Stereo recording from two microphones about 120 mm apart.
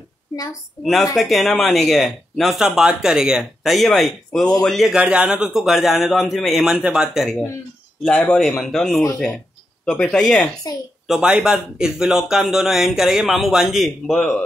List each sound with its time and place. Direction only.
1.1 s speech: centre (ahead or behind)
7.2 s speech: 15° left (ahead or behind)
11.1 s speech: 5° right (ahead or behind)